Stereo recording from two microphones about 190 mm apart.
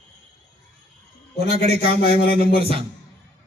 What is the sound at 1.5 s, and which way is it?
Speech, 30° right (ahead or behind).